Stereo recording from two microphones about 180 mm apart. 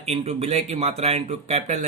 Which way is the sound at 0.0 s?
35° right (ahead or behind).